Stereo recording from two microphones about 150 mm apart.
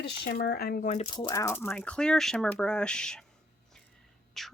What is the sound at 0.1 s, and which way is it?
Speech, 85° left.